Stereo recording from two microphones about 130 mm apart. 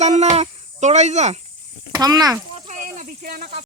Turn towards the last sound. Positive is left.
turn(degrees=-90)